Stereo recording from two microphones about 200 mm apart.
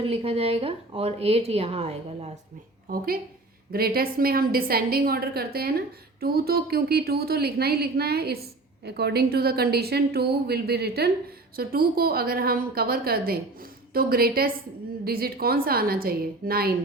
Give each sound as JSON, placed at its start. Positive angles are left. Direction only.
{"t": 0.0, "sound": "speech", "side_deg": -30}
{"t": 3.7, "sound": "a woman's voice", "side_deg": -50}